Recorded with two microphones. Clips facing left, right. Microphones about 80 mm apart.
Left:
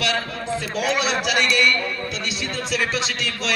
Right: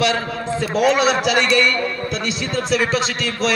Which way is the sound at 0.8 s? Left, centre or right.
Right.